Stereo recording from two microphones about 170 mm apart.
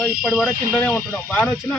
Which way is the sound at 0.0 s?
Centre (ahead or behind).